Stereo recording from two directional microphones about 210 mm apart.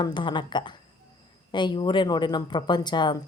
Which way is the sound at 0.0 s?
20° left (ahead or behind).